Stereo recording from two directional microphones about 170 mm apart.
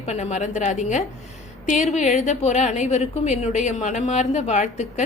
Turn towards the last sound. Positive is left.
turn(degrees=45)  # may be behind; listen again after turning